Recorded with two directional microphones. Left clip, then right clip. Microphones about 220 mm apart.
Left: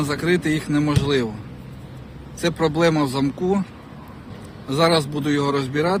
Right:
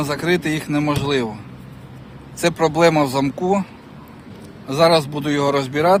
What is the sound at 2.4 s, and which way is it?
A man's voice, 10° right (ahead or behind).